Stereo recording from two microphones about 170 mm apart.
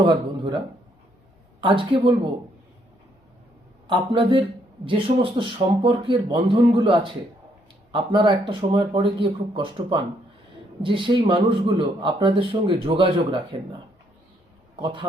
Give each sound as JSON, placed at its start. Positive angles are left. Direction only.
{"t": 0.0, "sound": "speech", "side_deg": -20}
{"t": 1.6, "sound": "speech", "side_deg": -30}
{"t": 3.8, "sound": "a man's voice", "side_deg": -30}
{"t": 14.8, "sound": "speech", "side_deg": -25}